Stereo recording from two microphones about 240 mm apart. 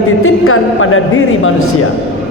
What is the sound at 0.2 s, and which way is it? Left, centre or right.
A woman's voice, left.